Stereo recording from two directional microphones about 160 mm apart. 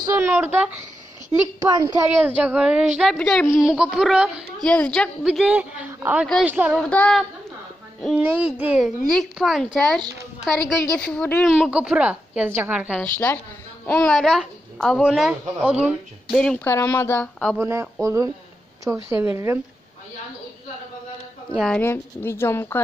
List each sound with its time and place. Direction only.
0.2 s a woman's voice: 15° right (ahead or behind)
1.6 s a woman's voice: 25° right (ahead or behind)
2.0 s a woman's voice: 10° right (ahead or behind)
6.8 s a woman's voice: 5° left (ahead or behind)
8.0 s a woman's voice: 5° right (ahead or behind)
13.0 s a woman's voice: 15° left (ahead or behind); by 16.3 s 5° right (ahead or behind)
16.6 s a woman's voice: 15° left (ahead or behind)
17.6 s a woman's voice: 15° right (ahead or behind)
21.5 s a woman's voice: 5° left (ahead or behind)
21.8 s a woman's voice: 15° left (ahead or behind)